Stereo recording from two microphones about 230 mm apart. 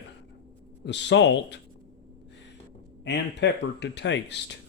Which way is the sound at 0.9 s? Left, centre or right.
Left.